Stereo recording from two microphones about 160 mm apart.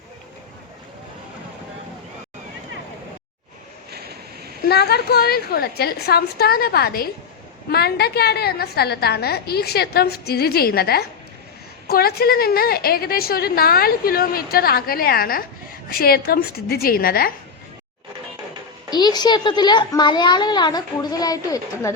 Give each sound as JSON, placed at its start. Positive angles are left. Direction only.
{"t": 3.9, "sound": "vehicle", "side_deg": -80}
{"t": 4.6, "sound": "a woman's voice", "side_deg": 90}
{"t": 7.7, "sound": "a woman's voice", "side_deg": 85}
{"t": 18.9, "sound": "a woman's voice", "side_deg": 25}